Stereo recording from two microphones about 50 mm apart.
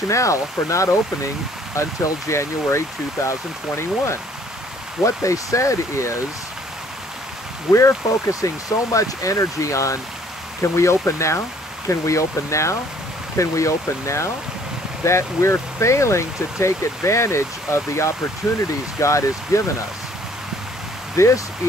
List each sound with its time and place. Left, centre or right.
0.1 s speech: left
1.8 s speech: left
5.0 s speech: left
7.7 s speech: left
10.6 s speech: left
11.9 s speech: left
18.9 s speech: left
21.2 s speech: left